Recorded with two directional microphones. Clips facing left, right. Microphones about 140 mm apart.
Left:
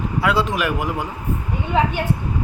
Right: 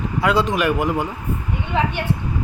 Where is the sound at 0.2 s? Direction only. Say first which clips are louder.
Right 2 dB; centre (ahead or behind).